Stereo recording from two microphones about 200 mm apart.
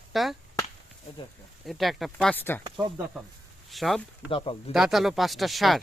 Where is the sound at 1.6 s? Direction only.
Centre (ahead or behind).